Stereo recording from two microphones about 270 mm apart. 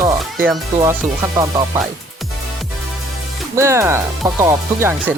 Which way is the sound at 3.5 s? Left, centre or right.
Centre.